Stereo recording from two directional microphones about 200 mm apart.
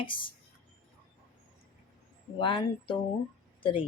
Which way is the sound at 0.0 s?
25° left (ahead or behind).